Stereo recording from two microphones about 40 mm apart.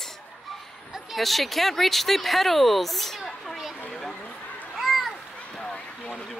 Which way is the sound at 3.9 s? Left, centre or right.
Centre.